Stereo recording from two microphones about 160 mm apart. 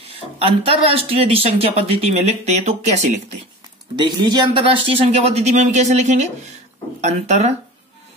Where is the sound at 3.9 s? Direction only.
30° right (ahead or behind); by 7.5 s 45° right (ahead or behind).